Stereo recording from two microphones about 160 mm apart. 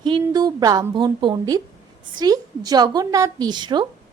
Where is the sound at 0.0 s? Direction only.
25° right (ahead or behind).